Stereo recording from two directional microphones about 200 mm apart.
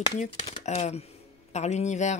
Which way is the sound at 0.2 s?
35° left (ahead or behind).